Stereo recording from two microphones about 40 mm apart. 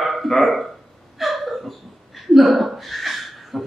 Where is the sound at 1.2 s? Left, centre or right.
Centre.